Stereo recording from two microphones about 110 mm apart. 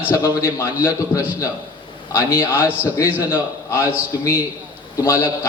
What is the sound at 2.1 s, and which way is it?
A man's voice, 20° left (ahead or behind).